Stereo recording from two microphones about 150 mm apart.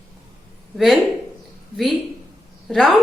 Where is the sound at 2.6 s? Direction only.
Centre (ahead or behind).